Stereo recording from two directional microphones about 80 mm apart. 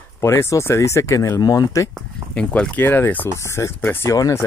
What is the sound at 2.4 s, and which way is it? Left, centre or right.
Speech, centre.